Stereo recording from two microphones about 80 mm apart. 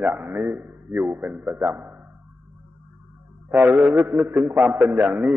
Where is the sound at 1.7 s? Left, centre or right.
Right.